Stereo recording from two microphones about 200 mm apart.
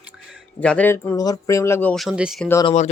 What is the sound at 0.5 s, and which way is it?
Speech, 5° left (ahead or behind).